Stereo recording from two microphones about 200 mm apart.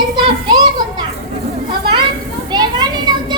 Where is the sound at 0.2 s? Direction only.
25° right (ahead or behind).